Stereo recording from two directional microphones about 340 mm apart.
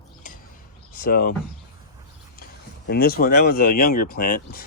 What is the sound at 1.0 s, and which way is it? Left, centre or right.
Speech, left.